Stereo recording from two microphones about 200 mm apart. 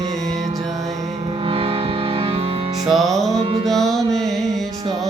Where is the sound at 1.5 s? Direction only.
30° right (ahead or behind).